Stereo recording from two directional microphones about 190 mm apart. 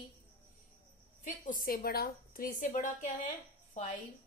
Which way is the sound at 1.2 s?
45° left (ahead or behind).